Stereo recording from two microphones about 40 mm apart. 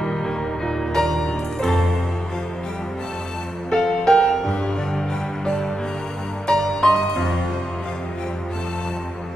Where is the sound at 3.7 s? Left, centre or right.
Centre.